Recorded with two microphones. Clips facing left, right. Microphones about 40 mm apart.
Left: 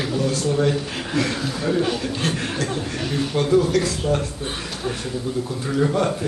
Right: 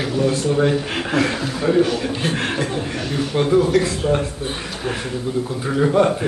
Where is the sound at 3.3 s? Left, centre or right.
Centre.